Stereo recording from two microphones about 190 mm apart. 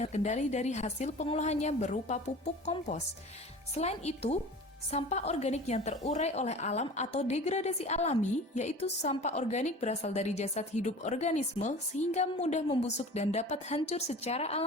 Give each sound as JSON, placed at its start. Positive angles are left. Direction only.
{"t": 0.0, "sound": "a woman's voice", "side_deg": 35}